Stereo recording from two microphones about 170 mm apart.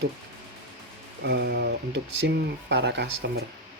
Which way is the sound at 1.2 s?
75° right (ahead or behind).